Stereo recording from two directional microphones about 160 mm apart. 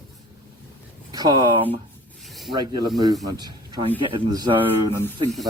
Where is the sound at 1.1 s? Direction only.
25° right (ahead or behind).